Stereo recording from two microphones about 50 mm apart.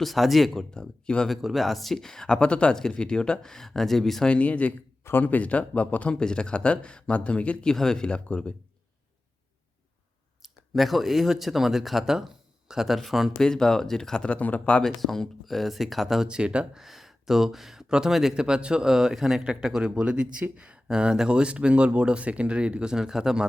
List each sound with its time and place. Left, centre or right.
0.0 s speech: centre
0.7 s speech: centre
1.3 s speech: centre
4.3 s speech: left
7.6 s speech: centre
10.4 s speech: centre
13.4 s speech: centre
14.3 s speech: left
14.8 s speech: centre
16.2 s speech: centre
16.7 s speech: centre
18.3 s a man's voice: centre